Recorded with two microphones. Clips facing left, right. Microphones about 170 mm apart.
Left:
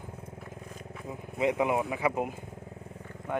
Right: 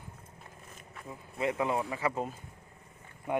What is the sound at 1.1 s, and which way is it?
Vehicle, 20° left (ahead or behind).